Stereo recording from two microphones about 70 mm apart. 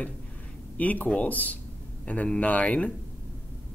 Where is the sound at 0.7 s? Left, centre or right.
Left.